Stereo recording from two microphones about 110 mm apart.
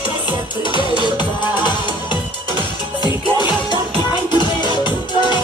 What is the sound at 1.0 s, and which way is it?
Music, 40° left (ahead or behind).